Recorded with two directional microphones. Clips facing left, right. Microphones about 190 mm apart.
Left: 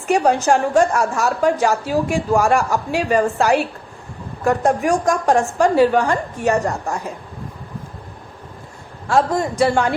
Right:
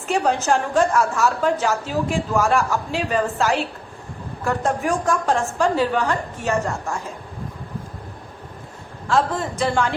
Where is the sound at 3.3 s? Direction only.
15° left (ahead or behind).